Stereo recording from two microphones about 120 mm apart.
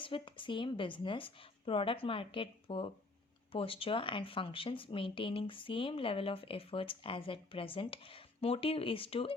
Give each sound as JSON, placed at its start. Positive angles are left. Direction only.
{"t": 0.0, "sound": "speech", "side_deg": 45}